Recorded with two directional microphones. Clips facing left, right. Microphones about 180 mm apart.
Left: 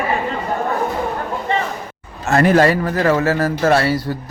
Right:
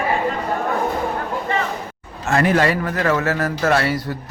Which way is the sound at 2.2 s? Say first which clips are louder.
Left 4 dB; 40° left (ahead or behind).